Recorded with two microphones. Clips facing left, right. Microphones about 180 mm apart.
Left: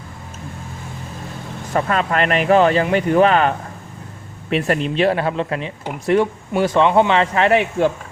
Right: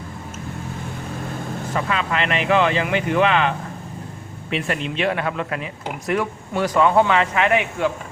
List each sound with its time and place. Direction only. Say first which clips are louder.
1.7 s a man's voice: left 5 dB; 45° left (ahead or behind)